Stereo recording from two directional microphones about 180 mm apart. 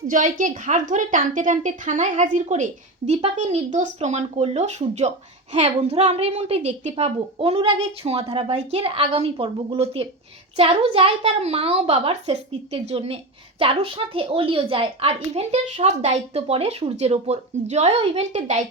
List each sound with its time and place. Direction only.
0.1 s a woman's voice: 45° right (ahead or behind)